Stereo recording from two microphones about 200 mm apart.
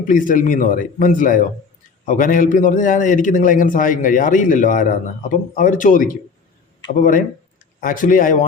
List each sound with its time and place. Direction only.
0.1 s a man's voice: 40° left (ahead or behind)